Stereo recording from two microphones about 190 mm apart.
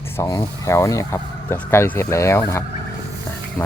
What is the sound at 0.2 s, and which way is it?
Speech, 15° left (ahead or behind).